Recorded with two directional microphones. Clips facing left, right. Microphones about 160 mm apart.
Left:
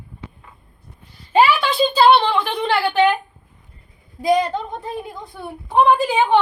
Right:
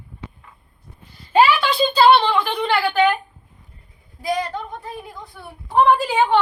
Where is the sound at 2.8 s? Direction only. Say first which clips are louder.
Left 2 dB; 25° left (ahead or behind).